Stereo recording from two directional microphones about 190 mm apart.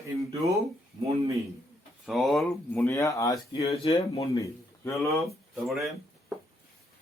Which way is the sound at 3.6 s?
30° left (ahead or behind).